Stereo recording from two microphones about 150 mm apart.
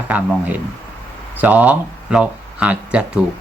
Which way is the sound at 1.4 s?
10° right (ahead or behind).